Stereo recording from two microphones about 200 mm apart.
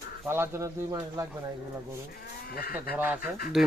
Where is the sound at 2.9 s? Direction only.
10° right (ahead or behind).